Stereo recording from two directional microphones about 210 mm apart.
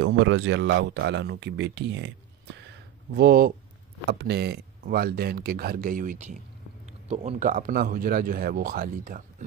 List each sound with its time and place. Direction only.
0.0 s speech: 55° right (ahead or behind)
2.7 s a sound: 50° right (ahead or behind)
4.1 s a man's voice: 50° right (ahead or behind)